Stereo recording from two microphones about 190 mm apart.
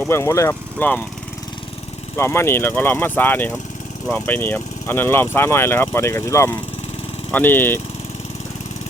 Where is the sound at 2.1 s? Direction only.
15° left (ahead or behind).